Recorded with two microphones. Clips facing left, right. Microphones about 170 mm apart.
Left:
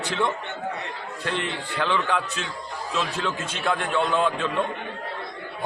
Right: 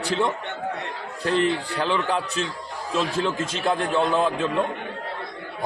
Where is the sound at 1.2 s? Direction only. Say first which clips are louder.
Right 8 dB; 40° right (ahead or behind).